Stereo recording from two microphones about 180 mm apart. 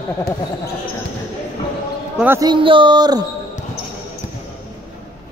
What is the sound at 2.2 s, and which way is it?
Speech, 15° right (ahead or behind).